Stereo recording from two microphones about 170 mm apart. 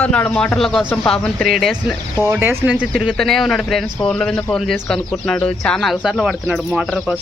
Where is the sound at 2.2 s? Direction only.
15° right (ahead or behind).